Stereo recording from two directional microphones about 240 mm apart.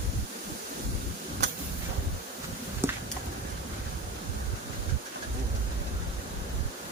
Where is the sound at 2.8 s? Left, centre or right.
Centre.